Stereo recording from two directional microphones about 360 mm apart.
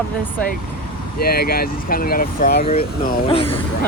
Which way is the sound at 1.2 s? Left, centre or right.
Left.